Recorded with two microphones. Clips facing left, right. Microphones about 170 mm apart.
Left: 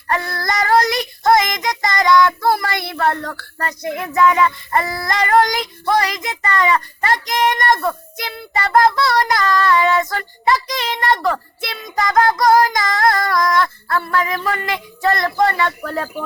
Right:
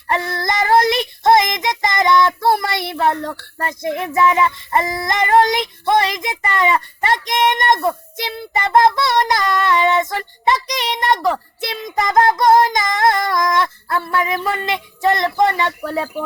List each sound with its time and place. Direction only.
0.1 s child singing: 20° right (ahead or behind)
15.4 s speech: 20° right (ahead or behind)